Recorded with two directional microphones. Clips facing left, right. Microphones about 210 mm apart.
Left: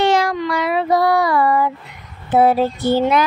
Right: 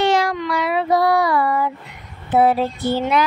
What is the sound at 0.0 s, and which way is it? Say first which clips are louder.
Child singing: left 2 dB; 45° left (ahead or behind).